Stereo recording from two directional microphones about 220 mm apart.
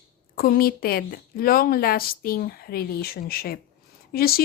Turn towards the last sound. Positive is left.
turn(degrees=45)  # may be behind; listen again after turning